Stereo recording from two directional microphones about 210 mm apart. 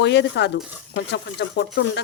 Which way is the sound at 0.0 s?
55° left (ahead or behind).